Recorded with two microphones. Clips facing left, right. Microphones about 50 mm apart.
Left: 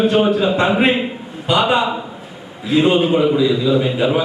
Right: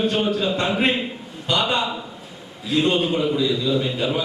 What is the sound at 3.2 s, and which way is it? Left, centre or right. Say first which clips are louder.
Speech: left 6 dB; centre.